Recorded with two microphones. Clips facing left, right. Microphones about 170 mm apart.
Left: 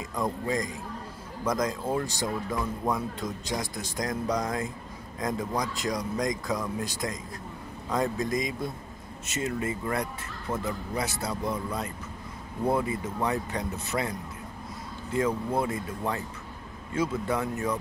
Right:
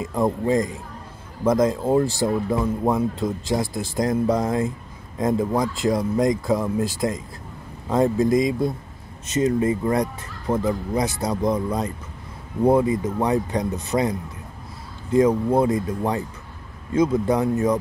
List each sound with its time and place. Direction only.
0.0 s speech: 30° right (ahead or behind)
15.1 s speech: 35° right (ahead or behind)
17.3 s speech: 35° right (ahead or behind)